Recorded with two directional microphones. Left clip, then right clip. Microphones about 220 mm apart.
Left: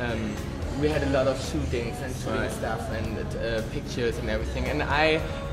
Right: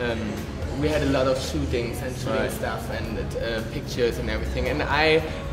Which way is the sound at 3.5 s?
25° left (ahead or behind).